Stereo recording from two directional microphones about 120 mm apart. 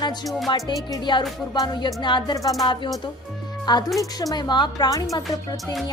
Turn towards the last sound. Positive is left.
turn(degrees=30)  # may be behind; listen again after turning